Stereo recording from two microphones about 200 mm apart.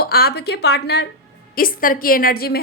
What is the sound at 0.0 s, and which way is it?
A woman's voice, 50° left (ahead or behind).